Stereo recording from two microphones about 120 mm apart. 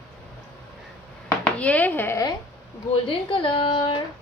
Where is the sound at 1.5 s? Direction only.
10° left (ahead or behind).